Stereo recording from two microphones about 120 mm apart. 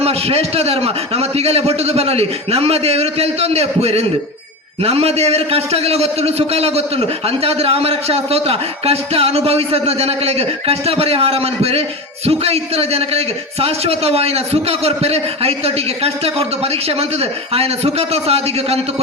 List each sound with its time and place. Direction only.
0.0 s a man's voice: 55° right (ahead or behind)